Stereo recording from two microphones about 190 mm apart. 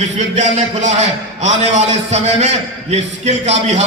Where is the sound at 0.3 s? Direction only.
40° right (ahead or behind).